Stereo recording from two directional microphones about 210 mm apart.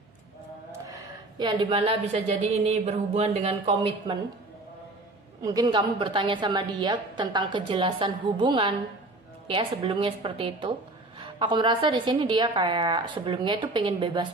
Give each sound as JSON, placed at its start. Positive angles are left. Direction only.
{"t": 1.4, "sound": "a woman's voice", "side_deg": -20}
{"t": 5.4, "sound": "a woman's voice", "side_deg": -20}